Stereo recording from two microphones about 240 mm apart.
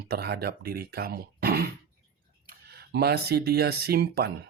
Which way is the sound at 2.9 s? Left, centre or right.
Right.